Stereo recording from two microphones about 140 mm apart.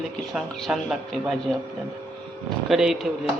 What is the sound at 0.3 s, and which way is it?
Speech, centre (ahead or behind).